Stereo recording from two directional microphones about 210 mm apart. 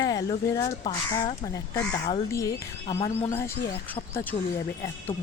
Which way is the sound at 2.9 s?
25° left (ahead or behind).